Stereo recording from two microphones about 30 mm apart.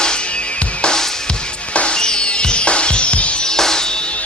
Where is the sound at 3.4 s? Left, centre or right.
Centre.